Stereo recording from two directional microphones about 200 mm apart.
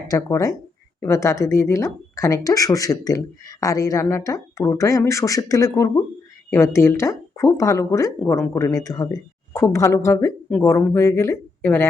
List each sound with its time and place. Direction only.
0.1 s speech: 15° left (ahead or behind)